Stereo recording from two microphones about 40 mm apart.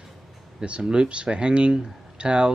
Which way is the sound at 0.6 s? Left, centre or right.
Right.